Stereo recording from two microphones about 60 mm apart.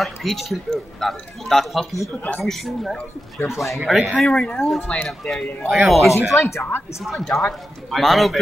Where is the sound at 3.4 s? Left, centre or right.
Left.